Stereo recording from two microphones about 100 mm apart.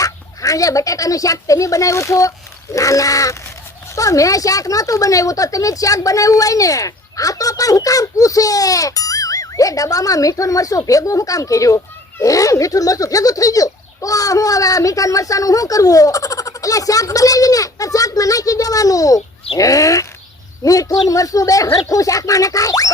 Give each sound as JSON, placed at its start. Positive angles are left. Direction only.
{"t": 0.0, "sound": "speech", "side_deg": 35}